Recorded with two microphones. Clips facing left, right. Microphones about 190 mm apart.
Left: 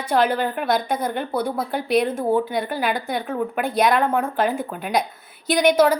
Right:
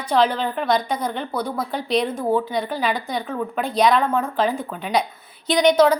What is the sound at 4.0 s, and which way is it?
A woman's voice, 10° left (ahead or behind).